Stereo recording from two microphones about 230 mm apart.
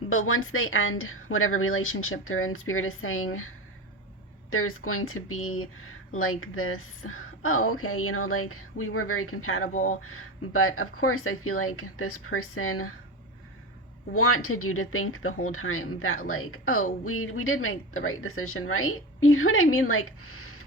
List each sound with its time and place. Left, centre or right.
0.1 s speech: left
4.5 s speech: left
9.7 s speech: left
10.0 s speech: left
14.1 s speech: left